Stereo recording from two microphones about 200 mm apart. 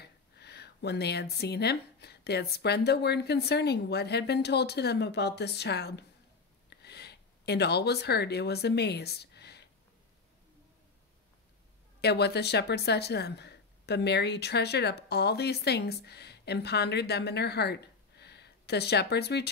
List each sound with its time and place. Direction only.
0.0 s speech: 55° left (ahead or behind)
6.7 s a sound: 55° left (ahead or behind)
12.0 s speech: 55° left (ahead or behind)